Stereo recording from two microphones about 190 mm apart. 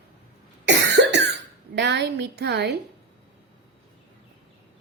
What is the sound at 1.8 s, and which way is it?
A woman's voice, 65° right (ahead or behind).